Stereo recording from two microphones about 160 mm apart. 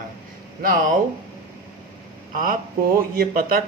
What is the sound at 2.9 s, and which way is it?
Speech, 65° right (ahead or behind).